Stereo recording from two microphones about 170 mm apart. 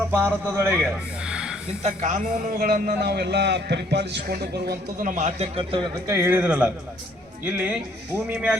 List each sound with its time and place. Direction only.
0.1 s a man's voice: 15° right (ahead or behind)
1.8 s a man's voice: 45° right (ahead or behind)
6.1 s a man's voice: 15° right (ahead or behind)